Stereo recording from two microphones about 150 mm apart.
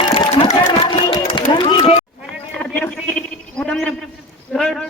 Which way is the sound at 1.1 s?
35° left (ahead or behind).